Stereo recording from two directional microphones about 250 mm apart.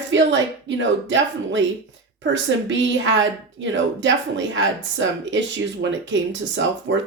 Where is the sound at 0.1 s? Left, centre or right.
Right.